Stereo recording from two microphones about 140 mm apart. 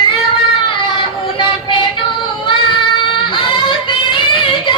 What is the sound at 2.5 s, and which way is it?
Child singing, 35° left (ahead or behind).